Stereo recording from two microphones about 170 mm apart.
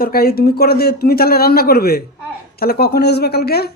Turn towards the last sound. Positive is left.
turn(degrees=65)  # may be behind; listen again after turning